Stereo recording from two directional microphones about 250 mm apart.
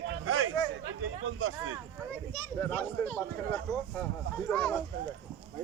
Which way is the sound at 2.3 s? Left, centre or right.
Centre.